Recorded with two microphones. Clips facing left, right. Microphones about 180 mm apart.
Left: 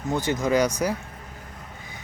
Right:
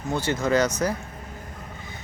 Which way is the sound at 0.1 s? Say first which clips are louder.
Even; 15° left (ahead or behind).